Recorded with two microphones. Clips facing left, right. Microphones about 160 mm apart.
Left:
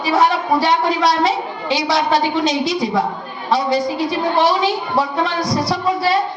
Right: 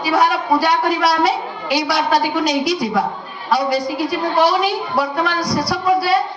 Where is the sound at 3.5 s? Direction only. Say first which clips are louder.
Left 1 dB; 25° left (ahead or behind).